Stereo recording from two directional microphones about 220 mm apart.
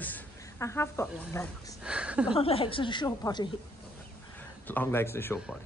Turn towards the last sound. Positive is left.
turn(degrees=10)  # may be behind; listen again after turning